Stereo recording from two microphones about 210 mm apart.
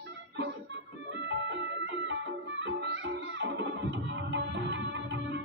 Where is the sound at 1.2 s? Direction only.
60° right (ahead or behind).